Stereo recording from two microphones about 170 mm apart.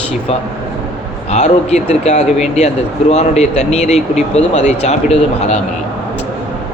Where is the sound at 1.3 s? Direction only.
40° left (ahead or behind).